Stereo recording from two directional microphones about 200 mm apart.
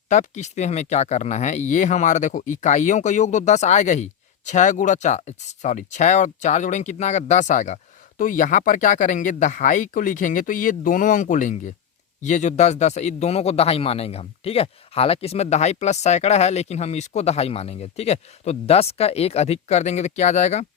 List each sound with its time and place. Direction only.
0.1 s a man's voice: 35° left (ahead or behind)